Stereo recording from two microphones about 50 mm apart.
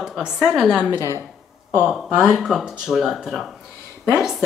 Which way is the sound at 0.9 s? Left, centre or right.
Left.